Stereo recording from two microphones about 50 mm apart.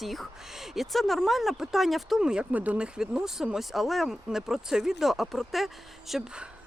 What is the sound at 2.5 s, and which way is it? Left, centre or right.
Speech, right.